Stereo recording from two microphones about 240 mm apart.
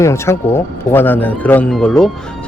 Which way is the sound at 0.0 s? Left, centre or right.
Centre.